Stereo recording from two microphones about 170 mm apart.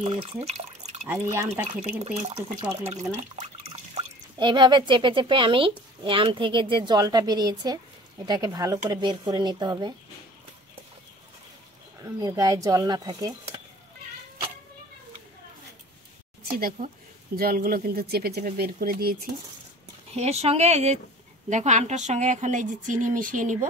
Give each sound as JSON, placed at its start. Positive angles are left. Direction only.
{"t": 0.0, "sound": "speech", "side_deg": -35}
{"t": 1.0, "sound": "speech", "side_deg": -15}
{"t": 2.0, "sound": "speech", "side_deg": -40}
{"t": 12.0, "sound": "speech", "side_deg": -20}
{"t": 16.4, "sound": "speech", "side_deg": -60}
{"t": 20.2, "sound": "a woman's voice", "side_deg": -40}